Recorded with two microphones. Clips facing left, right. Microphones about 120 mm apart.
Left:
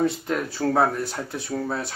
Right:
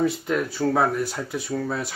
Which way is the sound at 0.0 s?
Centre (ahead or behind).